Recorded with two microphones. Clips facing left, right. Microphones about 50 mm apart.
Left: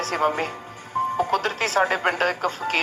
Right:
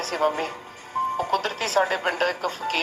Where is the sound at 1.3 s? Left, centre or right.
Left.